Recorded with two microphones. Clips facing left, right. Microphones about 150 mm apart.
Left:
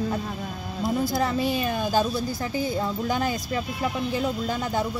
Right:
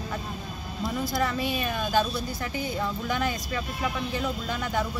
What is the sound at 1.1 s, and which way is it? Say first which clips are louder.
Speech: left 3 dB; 30° left (ahead or behind).